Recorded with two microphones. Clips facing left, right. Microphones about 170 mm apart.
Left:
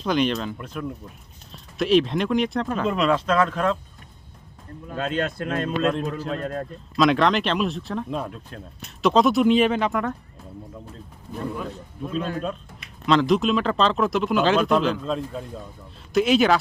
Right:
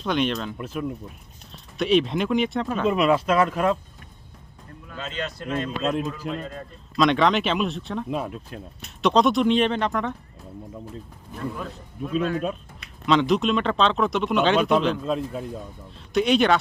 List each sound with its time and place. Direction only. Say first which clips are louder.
0.0 s speech: left 2 dB; centre (ahead or behind)
4.9 s speech: left 6 dB; 55° left (ahead or behind)
5.8 s speech: left 2 dB; 5° right (ahead or behind)
6.1 s a man's voice: left 3 dB; 60° left (ahead or behind)
6.9 s speech: left 1 dB; centre (ahead or behind)
13.1 s speech: left 1 dB; centre (ahead or behind)